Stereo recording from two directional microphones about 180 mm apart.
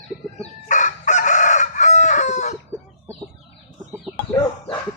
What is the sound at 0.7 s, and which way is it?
Chicken, 45° left (ahead or behind).